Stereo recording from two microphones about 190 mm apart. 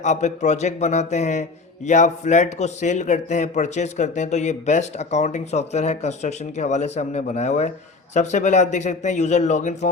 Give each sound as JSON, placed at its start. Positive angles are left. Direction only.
{"t": 0.0, "sound": "a man's voice", "side_deg": 40}